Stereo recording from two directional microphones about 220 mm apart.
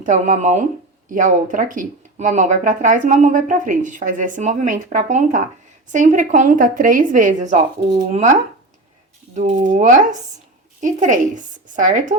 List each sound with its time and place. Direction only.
0.0 s a woman's voice: 35° right (ahead or behind)